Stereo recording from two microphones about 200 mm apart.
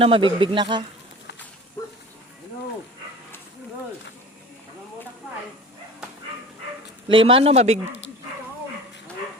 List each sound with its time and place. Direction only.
0.0 s speech: 25° right (ahead or behind)
1.8 s a sound: 15° left (ahead or behind)
7.1 s speech: 25° right (ahead or behind)